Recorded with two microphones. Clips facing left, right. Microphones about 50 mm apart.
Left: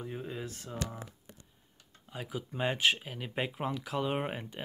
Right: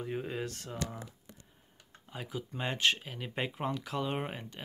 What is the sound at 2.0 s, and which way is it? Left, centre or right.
Speech, centre.